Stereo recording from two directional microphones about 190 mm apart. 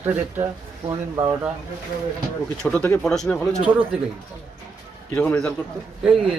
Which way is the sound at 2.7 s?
5° left (ahead or behind).